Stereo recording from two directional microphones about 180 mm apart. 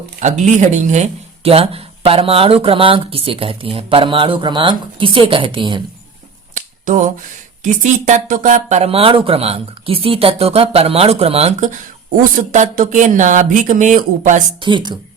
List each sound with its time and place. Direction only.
0.2 s speech: 40° right (ahead or behind)
6.5 s finger snapping: 45° right (ahead or behind)
7.6 s speech: 45° right (ahead or behind)
14.6 s speech: 25° right (ahead or behind)